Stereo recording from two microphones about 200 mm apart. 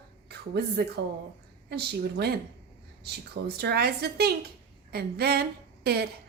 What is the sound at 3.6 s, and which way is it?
A woman's voice, 55° right (ahead or behind).